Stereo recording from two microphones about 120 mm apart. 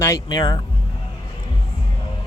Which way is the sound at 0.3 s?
35° left (ahead or behind).